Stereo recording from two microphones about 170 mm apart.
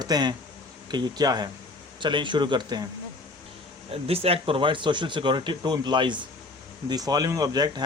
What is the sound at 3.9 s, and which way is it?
Speech, 35° right (ahead or behind).